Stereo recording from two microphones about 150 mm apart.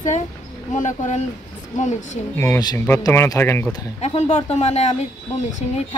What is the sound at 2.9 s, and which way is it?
Speech, 20° left (ahead or behind).